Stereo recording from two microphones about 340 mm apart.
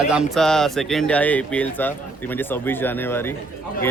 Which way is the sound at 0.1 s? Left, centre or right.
Centre.